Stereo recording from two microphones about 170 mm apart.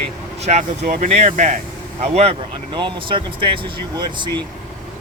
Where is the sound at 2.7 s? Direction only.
30° right (ahead or behind).